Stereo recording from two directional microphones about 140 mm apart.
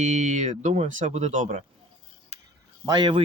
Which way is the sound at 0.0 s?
60° right (ahead or behind).